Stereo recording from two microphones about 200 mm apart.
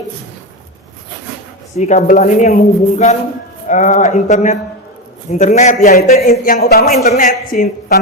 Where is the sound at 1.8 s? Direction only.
35° left (ahead or behind).